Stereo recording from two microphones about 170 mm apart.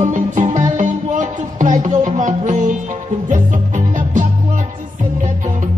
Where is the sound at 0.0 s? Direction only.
45° right (ahead or behind).